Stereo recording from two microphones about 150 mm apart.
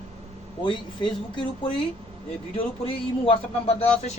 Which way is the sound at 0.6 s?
30° left (ahead or behind).